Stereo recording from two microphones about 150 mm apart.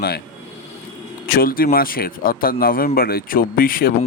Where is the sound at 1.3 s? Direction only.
75° left (ahead or behind).